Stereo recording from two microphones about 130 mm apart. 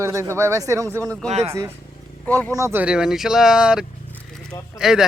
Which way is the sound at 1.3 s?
55° right (ahead or behind).